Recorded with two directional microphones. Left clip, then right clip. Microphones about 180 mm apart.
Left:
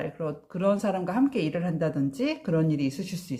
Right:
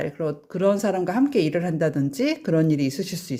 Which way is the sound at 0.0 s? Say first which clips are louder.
Right 5 dB; 35° right (ahead or behind).